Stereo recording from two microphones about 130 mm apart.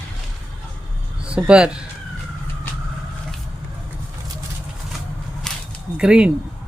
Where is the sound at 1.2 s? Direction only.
10° right (ahead or behind).